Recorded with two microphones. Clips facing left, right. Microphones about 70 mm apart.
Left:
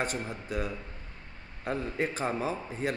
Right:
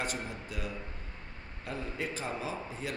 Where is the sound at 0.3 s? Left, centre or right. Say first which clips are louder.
Left 5 dB; left.